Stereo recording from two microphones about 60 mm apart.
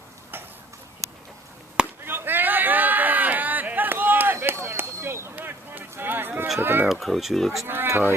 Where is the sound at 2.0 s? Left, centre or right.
Right.